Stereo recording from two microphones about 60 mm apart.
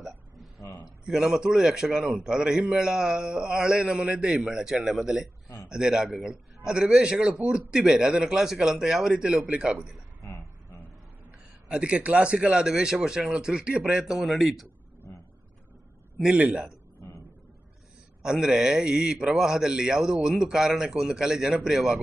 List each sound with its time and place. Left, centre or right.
1.0 s a man's voice: centre
11.7 s a man's voice: centre
15.1 s a sound: left
16.3 s a man's voice: right
18.2 s a man's voice: centre